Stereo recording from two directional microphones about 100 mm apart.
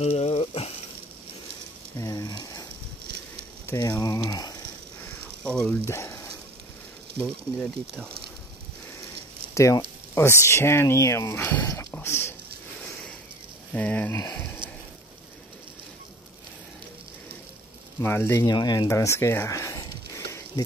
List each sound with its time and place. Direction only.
0.0 s sizzle: 75° left (ahead or behind)
2.0 s a sound: 40° left (ahead or behind)
3.7 s speech: 40° left (ahead or behind)
5.4 s frying: 10° left (ahead or behind)
5.9 s frying: 25° left (ahead or behind)
7.2 s speech: 20° left (ahead or behind)
9.5 s speech: 30° left (ahead or behind)
11.9 s a sound: 25° left (ahead or behind)
13.7 s speech: 15° left (ahead or behind)
18.0 s speech: 25° left (ahead or behind)
18.4 s speech: 45° left (ahead or behind)